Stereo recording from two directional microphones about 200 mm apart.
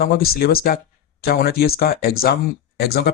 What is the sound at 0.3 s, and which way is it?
Speech, 50° left (ahead or behind).